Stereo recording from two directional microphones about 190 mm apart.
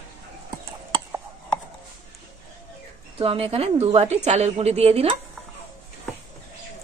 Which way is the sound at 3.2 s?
30° right (ahead or behind).